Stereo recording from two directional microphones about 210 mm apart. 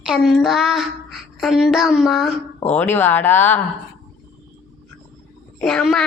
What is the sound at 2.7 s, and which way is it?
Speech, 10° left (ahead or behind).